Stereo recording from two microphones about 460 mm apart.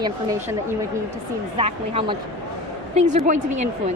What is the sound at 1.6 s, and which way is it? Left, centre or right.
A woman's voice, centre.